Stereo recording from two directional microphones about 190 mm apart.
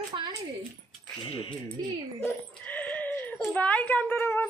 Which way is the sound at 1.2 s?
25° left (ahead or behind).